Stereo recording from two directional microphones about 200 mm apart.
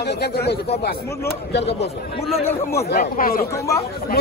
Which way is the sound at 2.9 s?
45° left (ahead or behind).